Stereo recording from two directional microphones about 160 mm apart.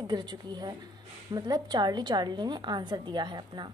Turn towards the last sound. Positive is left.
turn(degrees=-25)  # may be behind; listen again after turning